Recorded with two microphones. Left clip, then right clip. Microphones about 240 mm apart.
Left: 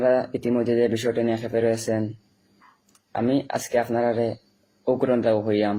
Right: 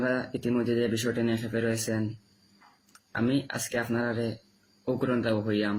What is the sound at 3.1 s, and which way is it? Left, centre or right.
Speech, centre.